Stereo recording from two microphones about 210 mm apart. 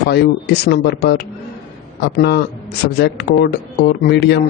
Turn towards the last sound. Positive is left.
turn(degrees=55)  # may be behind; listen again after turning